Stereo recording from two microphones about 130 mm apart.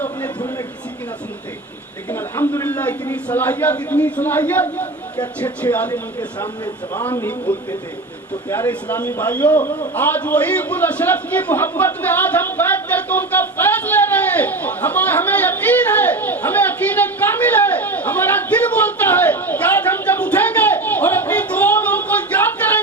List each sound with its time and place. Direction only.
2.0 s a man's voice: 20° left (ahead or behind)
5.9 s speech: 30° left (ahead or behind)
6.9 s a man's voice: 15° left (ahead or behind)
8.4 s a man's voice: 20° left (ahead or behind)
9.9 s a sound: 15° left (ahead or behind)